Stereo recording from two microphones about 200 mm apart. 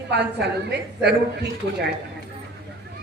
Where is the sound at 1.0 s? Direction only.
55° right (ahead or behind).